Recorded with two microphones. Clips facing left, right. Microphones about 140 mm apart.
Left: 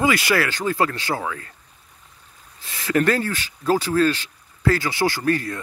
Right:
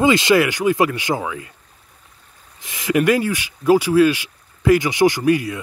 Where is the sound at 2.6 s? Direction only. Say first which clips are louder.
Right 2 dB; 15° right (ahead or behind).